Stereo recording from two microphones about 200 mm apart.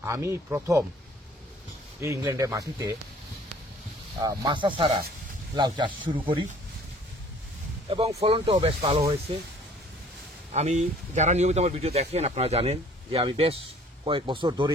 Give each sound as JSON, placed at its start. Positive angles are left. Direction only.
{"t": 0.0, "sound": "speech", "side_deg": -15}
{"t": 2.0, "sound": "speech", "side_deg": -15}
{"t": 4.2, "sound": "speech", "side_deg": -20}
{"t": 8.2, "sound": "speech", "side_deg": -30}
{"t": 10.5, "sound": "speech", "side_deg": -35}